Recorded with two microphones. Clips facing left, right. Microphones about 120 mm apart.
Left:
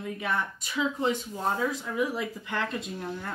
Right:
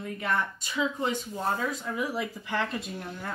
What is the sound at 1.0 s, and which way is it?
Speech, 15° left (ahead or behind).